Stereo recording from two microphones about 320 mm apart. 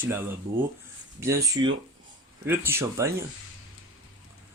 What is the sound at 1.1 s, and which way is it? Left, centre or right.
Speech, centre.